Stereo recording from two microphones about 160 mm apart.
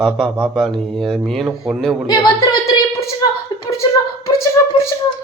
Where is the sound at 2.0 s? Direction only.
25° left (ahead or behind).